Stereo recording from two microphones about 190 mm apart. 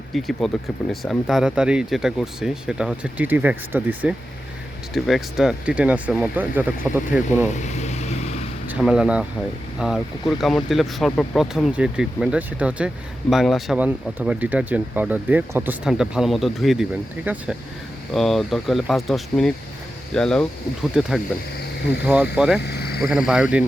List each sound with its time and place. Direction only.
0.1 s speech: centre (ahead or behind)
7.5 s vehicle: 40° left (ahead or behind)
8.6 s speech: 5° right (ahead or behind)
22.0 s speech: 5° right (ahead or behind)
22.6 s vehicle: 60° left (ahead or behind)
23.0 s speech: 5° right (ahead or behind)